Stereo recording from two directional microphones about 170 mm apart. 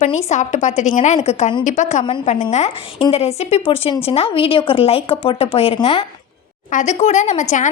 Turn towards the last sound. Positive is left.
turn(degrees=45)  # may be behind; listen again after turning